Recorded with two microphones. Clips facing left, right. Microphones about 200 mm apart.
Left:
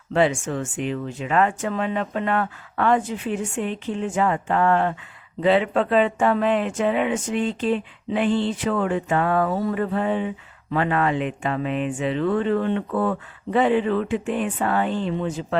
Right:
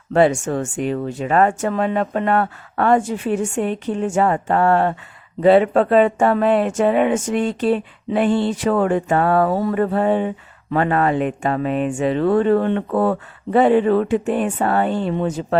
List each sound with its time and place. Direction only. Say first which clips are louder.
0.1 s speech: right 5 dB; 45° right (ahead or behind)
12.9 s speech: right 5 dB; 40° right (ahead or behind)